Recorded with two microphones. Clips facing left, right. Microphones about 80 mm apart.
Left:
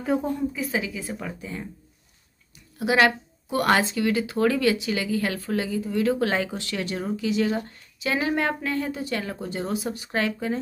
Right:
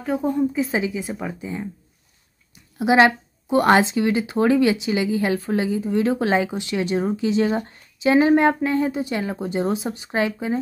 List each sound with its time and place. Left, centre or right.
0.4 s a woman's voice: right